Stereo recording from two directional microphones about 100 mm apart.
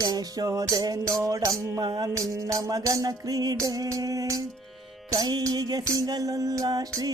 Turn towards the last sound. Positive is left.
turn(degrees=-40)  # may be behind; listen again after turning